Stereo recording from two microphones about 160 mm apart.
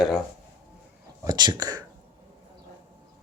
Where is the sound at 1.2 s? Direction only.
25° right (ahead or behind).